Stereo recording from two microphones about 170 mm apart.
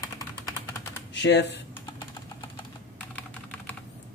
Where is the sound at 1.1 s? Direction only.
90° left.